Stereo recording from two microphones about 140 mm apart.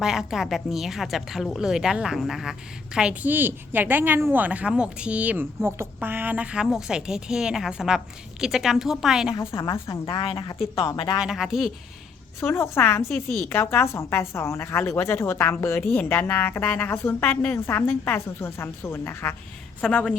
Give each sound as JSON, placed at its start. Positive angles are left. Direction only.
{"t": 0.0, "sound": "a woman's voice", "side_deg": -5}
{"t": 9.3, "sound": "a woman's voice", "side_deg": 20}
{"t": 10.1, "sound": "speech", "side_deg": 35}
{"t": 11.2, "sound": "a woman's voice", "side_deg": -5}
{"t": 12.4, "sound": "a woman's voice", "side_deg": 20}